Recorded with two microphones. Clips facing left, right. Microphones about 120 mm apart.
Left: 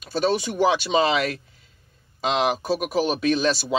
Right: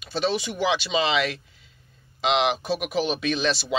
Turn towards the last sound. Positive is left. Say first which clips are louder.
# left 3 dB
turn(degrees=45)  # may be behind; listen again after turning